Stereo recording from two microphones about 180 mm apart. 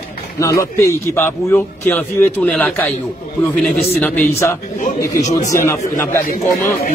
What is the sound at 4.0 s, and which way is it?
Speech, 10° left (ahead or behind).